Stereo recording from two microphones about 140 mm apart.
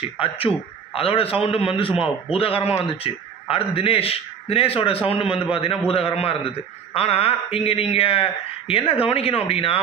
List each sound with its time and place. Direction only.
0.2 s a man's voice: 40° left (ahead or behind)